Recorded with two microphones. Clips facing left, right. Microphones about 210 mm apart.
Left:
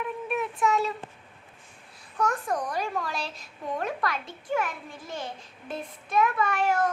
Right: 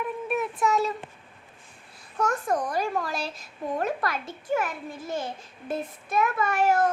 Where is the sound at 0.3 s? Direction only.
40° right (ahead or behind).